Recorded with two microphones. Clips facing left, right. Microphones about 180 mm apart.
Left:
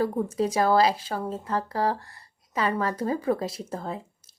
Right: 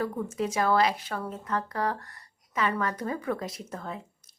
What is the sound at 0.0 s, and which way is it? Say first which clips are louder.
Speech: left 5 dB; 35° left (ahead or behind).